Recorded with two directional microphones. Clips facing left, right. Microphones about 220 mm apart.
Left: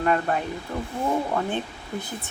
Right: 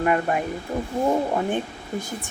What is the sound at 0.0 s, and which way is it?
Speech, 10° right (ahead or behind).